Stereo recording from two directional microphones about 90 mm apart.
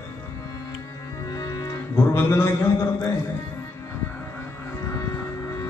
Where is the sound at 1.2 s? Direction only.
40° left (ahead or behind).